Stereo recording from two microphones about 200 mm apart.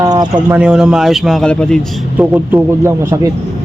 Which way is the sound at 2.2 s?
10° right (ahead or behind).